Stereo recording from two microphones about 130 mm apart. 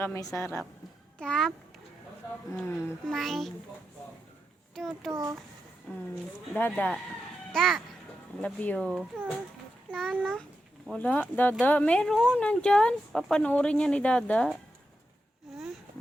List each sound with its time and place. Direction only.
0.0 s a woman's voice: 25° left (ahead or behind)
1.2 s a child's voice: 5° left (ahead or behind)
2.6 s a woman's voice: 20° left (ahead or behind)
3.1 s a child's voice: centre (ahead or behind)
4.7 s a child's voice: 5° left (ahead or behind)